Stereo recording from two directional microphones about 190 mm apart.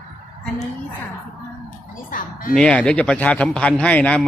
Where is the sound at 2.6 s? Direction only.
5° left (ahead or behind).